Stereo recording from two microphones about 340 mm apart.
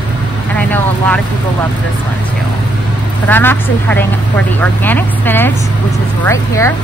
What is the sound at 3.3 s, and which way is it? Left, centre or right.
Speech, centre.